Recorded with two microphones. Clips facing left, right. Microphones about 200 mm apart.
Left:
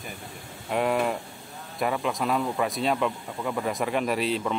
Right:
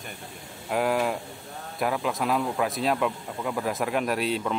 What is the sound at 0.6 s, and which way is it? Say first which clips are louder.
Speech: even; centre (ahead or behind).